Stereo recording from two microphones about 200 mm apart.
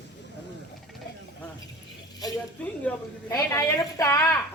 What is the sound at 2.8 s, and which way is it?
A woman's voice, 15° left (ahead or behind).